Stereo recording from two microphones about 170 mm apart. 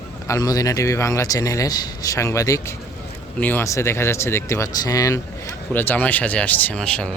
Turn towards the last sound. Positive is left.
turn(degrees=5)  # may be behind; listen again after turning